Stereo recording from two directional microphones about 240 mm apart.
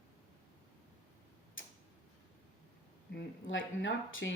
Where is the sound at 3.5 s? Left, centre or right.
Left.